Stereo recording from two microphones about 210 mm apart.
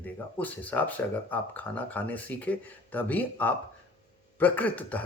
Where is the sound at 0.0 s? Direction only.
10° left (ahead or behind).